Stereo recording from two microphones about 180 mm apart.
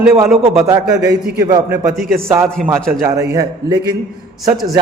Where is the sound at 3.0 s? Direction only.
15° right (ahead or behind).